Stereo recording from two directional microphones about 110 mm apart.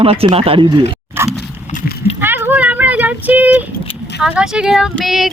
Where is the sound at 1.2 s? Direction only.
20° right (ahead or behind).